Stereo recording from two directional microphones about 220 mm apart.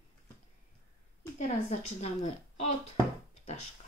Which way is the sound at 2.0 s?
30° left (ahead or behind).